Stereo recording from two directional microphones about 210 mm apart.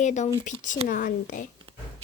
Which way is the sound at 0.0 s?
35° left (ahead or behind).